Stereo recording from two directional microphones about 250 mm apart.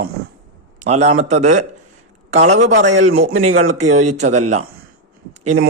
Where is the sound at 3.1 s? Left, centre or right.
Right.